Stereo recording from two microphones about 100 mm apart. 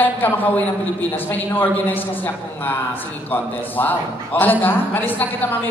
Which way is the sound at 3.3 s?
20° left (ahead or behind).